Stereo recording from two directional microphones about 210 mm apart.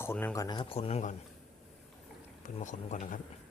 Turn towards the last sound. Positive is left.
turn(degrees=35)  # may be behind; listen again after turning